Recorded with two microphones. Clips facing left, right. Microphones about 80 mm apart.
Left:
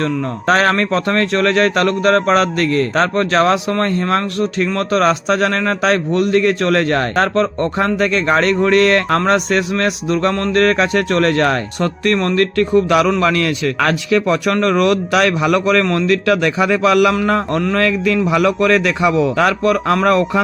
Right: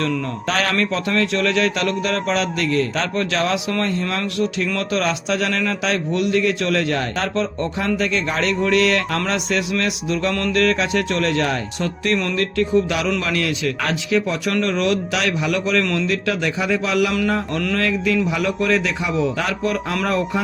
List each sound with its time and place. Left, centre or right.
0.4 s a man's voice: left
13.7 s a man's voice: left
14.5 s a man's voice: left
18.3 s a man's voice: left